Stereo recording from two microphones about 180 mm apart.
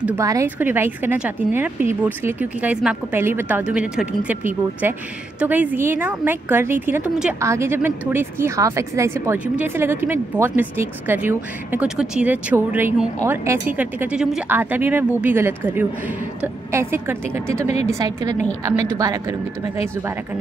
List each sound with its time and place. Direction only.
0.2 s a woman's voice: 15° right (ahead or behind)